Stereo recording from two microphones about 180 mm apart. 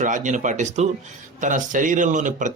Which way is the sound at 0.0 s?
45° right (ahead or behind).